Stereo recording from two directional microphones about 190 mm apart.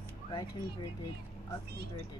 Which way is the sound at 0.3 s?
20° left (ahead or behind).